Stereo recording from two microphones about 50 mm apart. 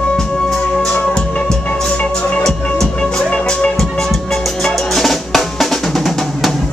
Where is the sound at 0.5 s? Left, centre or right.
Centre.